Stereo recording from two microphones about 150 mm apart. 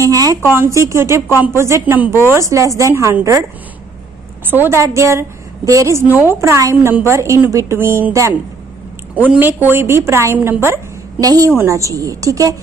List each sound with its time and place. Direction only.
0.0 s a woman's voice: 25° right (ahead or behind)
4.5 s a woman's voice: 15° right (ahead or behind)